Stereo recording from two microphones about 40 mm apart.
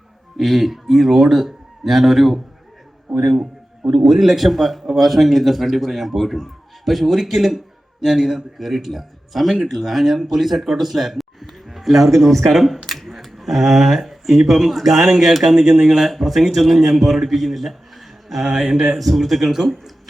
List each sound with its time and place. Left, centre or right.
0.3 s a man's voice: centre
8.5 s a man's voice: centre
18.4 s a man's voice: right
18.9 s a man's voice: centre